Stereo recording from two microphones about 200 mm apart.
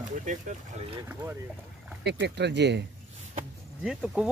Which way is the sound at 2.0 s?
60° right (ahead or behind).